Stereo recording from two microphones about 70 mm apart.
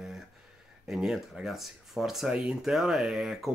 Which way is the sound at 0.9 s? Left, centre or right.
Centre.